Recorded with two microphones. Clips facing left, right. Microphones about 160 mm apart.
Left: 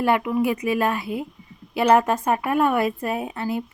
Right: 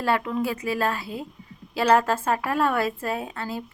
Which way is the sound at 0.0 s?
15° left (ahead or behind).